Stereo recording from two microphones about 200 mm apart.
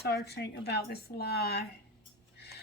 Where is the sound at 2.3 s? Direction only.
55° left (ahead or behind).